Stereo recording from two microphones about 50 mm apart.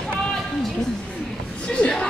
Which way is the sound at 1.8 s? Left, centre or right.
Left.